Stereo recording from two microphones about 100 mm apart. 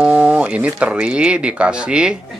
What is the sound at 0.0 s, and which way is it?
Speech, 10° right (ahead or behind).